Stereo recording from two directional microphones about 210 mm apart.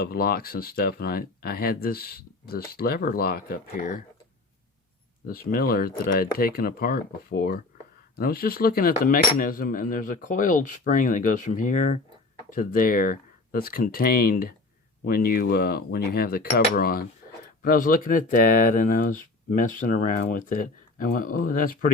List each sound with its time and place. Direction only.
0.0 s speech: 45° left (ahead or behind)
5.2 s speech: 45° left (ahead or behind)